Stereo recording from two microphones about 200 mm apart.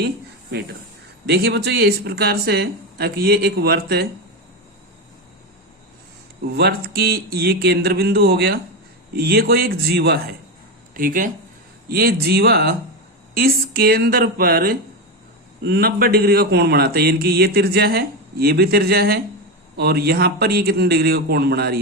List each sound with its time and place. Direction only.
1.3 s a man's voice: 55° right (ahead or behind)
6.5 s a man's voice: 50° right (ahead or behind)